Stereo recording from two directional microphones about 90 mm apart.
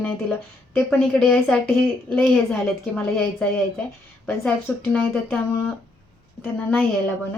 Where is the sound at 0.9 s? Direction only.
15° left (ahead or behind).